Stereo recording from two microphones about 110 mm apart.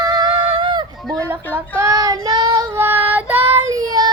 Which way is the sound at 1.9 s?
35° right (ahead or behind).